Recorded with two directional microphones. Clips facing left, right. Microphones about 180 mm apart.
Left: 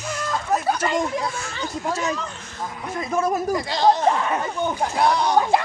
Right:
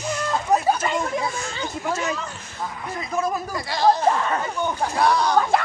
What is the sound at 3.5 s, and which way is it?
A man's voice, 20° left (ahead or behind).